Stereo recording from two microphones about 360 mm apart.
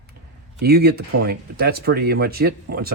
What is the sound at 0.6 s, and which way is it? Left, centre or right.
Speech, right.